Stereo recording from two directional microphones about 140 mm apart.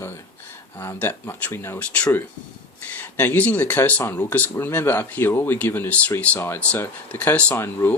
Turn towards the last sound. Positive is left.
turn(degrees=15)  # may be behind; listen again after turning